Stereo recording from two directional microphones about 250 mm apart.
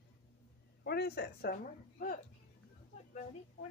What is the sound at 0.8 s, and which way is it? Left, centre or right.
Speech, left.